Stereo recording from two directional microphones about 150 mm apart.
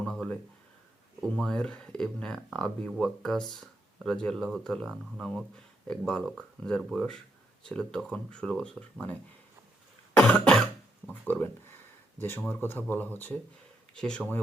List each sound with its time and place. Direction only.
0.0 s a sound: 5° left (ahead or behind)
1.2 s speech: 5° left (ahead or behind)
10.2 s cough: 5° left (ahead or behind)
11.0 s speech: 10° left (ahead or behind)